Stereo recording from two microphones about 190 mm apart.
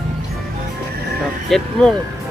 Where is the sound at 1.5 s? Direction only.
5° left (ahead or behind).